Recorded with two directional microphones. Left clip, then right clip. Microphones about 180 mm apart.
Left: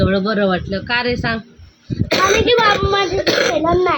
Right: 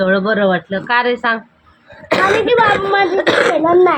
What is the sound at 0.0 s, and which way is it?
A woman's voice, 5° left (ahead or behind).